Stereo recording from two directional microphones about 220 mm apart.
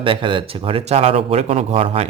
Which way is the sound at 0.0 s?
25° right (ahead or behind).